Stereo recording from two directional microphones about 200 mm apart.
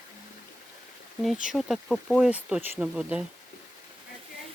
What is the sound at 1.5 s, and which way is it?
Speech, centre (ahead or behind).